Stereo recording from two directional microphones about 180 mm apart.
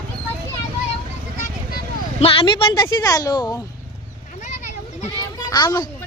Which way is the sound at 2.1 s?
30° left (ahead or behind).